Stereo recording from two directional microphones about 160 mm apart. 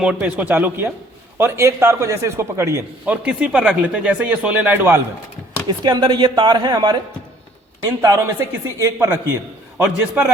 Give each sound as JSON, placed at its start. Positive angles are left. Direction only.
{"t": 0.0, "sound": "a man's voice", "side_deg": -10}
{"t": 3.2, "sound": "a man's voice", "side_deg": -5}
{"t": 5.6, "sound": "speech", "side_deg": -30}
{"t": 8.0, "sound": "a man's voice", "side_deg": -20}